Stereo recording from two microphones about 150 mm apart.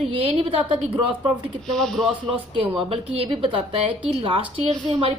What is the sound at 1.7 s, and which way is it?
Speech, 5° left (ahead or behind).